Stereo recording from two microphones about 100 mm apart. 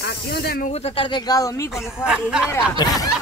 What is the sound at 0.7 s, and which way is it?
Speech, 90° left.